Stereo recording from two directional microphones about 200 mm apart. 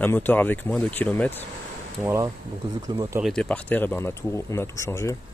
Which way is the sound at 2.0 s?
15° right (ahead or behind).